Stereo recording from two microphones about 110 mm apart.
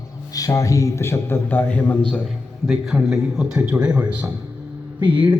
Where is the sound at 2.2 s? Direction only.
5° right (ahead or behind).